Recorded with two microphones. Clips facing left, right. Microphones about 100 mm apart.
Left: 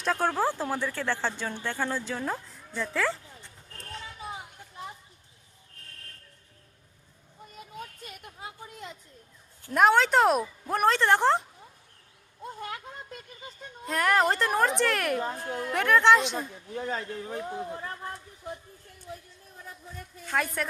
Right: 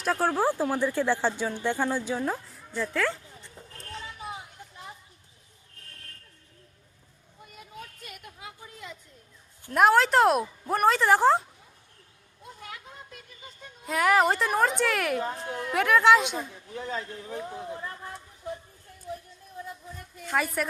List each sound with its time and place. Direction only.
0.0 s speech: 5° right (ahead or behind)
2.2 s speech: 5° right (ahead or behind)
8.0 s a sound: 40° left (ahead or behind)
9.7 s speech: centre (ahead or behind)
12.5 s a sound: 50° left (ahead or behind)
13.8 s speech: 5° right (ahead or behind)
16.8 s a man's voice: 45° left (ahead or behind)
20.3 s speech: centre (ahead or behind)